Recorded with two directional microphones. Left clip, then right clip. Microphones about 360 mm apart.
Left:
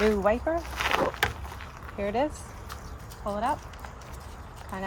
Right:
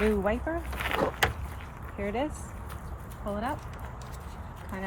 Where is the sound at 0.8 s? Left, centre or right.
Centre.